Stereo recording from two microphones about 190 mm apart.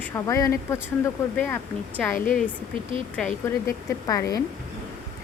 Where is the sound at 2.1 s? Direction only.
45° left (ahead or behind).